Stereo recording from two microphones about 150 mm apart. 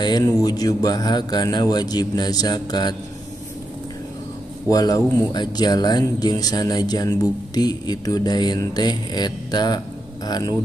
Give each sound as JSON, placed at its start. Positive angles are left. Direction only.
{"t": 0.0, "sound": "speech", "side_deg": 30}
{"t": 4.6, "sound": "speech", "side_deg": 25}